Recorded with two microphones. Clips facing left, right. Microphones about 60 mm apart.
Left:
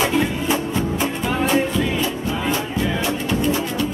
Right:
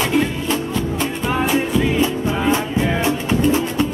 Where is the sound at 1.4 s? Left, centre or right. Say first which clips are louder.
Even; centre.